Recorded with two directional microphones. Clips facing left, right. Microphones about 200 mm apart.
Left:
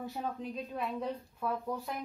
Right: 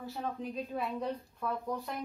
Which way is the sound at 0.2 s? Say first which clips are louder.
Right 3 dB; centre (ahead or behind).